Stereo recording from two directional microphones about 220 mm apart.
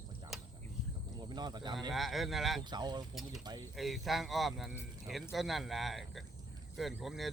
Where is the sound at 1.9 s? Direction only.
Centre (ahead or behind).